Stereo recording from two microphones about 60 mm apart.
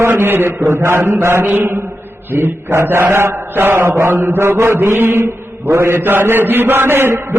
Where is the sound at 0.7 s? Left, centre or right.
Right.